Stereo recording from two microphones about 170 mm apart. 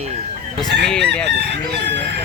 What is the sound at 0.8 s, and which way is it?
Speech, 5° left (ahead or behind).